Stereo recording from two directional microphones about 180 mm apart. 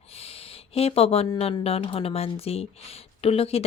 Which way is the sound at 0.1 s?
35° left (ahead or behind).